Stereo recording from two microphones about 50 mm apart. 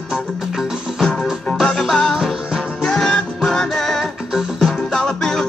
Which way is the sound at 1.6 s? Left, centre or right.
Centre.